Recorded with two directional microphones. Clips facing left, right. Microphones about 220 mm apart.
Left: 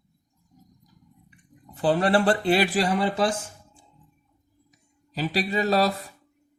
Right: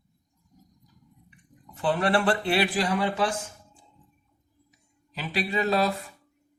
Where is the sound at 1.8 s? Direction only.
35° left (ahead or behind).